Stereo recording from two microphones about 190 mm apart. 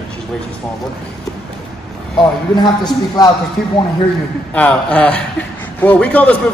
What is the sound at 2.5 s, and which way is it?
Speech, 20° left (ahead or behind).